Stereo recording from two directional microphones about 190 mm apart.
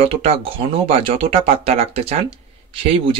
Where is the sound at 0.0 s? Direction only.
30° right (ahead or behind).